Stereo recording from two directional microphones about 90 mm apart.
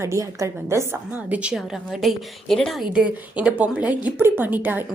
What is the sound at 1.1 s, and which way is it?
A woman's voice, 20° right (ahead or behind).